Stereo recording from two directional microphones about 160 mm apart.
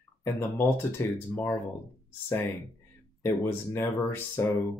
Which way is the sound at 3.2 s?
15° left (ahead or behind).